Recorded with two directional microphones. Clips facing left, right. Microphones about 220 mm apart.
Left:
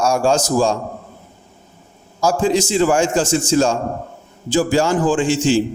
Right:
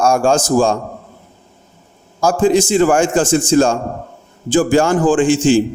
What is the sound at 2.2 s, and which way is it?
A man's voice, 50° right (ahead or behind).